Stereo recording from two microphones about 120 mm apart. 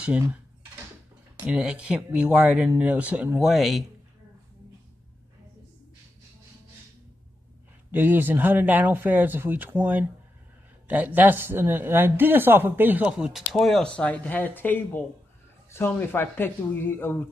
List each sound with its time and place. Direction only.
1.4 s speech: 5° right (ahead or behind)
3.3 s speech: centre (ahead or behind)
7.9 s speech: 15° right (ahead or behind); by 17.2 s 15° left (ahead or behind)